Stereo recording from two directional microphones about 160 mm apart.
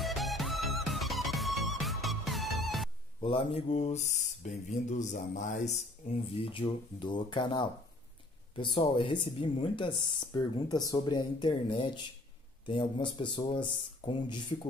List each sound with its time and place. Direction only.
0.0 s music: centre (ahead or behind)
3.2 s speech: 35° left (ahead or behind)